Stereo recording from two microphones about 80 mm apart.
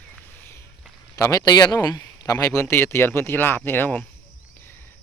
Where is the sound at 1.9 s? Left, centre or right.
Left.